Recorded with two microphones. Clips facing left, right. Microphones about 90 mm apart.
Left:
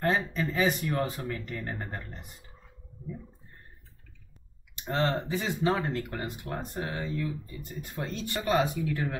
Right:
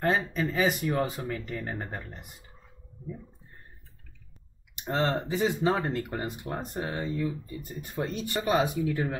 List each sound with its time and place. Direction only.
0.0 s speech: 10° right (ahead or behind)
4.7 s speech: 15° right (ahead or behind)
5.7 s speech: 5° right (ahead or behind)